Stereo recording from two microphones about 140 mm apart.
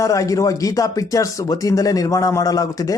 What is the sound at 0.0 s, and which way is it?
A man's voice, 25° left (ahead or behind).